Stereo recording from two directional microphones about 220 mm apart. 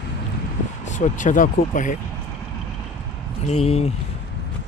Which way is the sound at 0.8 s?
35° left (ahead or behind).